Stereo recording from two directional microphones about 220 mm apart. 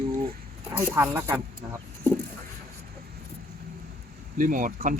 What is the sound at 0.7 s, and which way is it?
Speech, 15° right (ahead or behind).